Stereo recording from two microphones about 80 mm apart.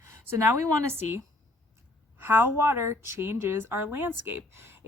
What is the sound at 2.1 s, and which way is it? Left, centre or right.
A woman's voice, right.